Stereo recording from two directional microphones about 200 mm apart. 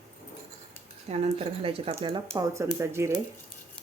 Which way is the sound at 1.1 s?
30° right (ahead or behind).